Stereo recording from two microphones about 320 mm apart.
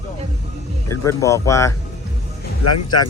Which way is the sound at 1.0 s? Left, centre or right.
Centre.